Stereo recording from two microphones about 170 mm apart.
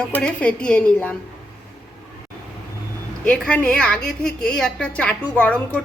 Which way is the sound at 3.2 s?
5° left (ahead or behind).